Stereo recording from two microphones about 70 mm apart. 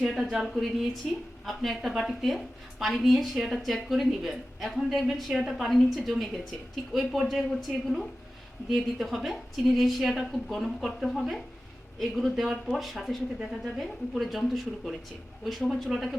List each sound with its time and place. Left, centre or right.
0.1 s a woman's voice: centre